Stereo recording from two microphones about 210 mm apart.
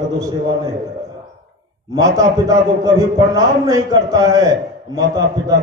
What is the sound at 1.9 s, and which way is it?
A man's voice, 15° right (ahead or behind).